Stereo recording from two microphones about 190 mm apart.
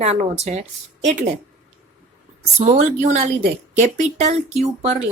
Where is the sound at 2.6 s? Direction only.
40° right (ahead or behind).